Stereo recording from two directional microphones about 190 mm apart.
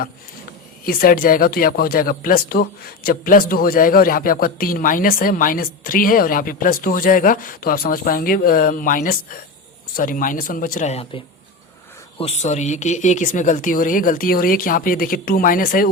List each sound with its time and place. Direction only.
0.9 s a man's voice: 50° left (ahead or behind)